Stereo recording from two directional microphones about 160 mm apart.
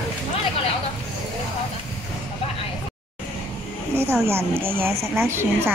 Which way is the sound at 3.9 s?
15° right (ahead or behind).